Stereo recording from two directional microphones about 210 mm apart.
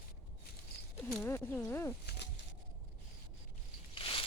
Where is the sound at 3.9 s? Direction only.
25° left (ahead or behind).